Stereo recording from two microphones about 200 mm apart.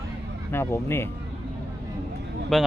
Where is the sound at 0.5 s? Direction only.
10° left (ahead or behind).